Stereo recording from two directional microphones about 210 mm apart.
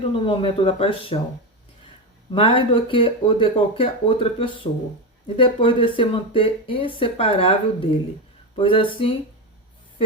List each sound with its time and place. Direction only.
0.0 s speech: 25° left (ahead or behind)
2.3 s speech: 25° left (ahead or behind)